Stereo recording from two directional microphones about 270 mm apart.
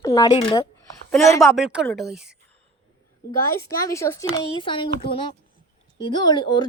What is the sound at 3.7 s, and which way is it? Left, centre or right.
A woman's voice, centre.